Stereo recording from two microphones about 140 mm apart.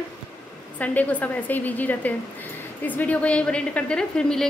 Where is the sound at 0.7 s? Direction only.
10° left (ahead or behind).